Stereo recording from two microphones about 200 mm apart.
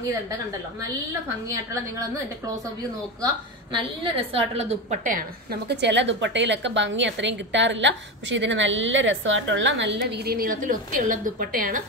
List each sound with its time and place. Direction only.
3.7 s a woman's voice: 25° right (ahead or behind); by 11.8 s 45° right (ahead or behind)